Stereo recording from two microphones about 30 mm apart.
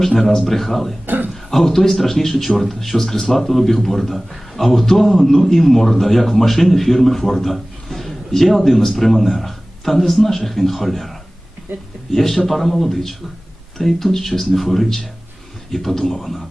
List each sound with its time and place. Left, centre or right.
0.0 s a man's voice: centre
1.0 s a sound: right
1.3 s a man's voice: centre
12.1 s a man's voice: centre